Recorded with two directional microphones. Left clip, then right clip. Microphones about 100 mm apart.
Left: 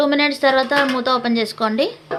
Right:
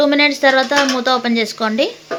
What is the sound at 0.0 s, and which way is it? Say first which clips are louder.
Speech: right 4 dB; 15° right (ahead or behind).